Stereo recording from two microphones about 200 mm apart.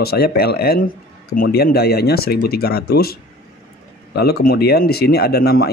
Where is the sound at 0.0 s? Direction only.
50° left (ahead or behind).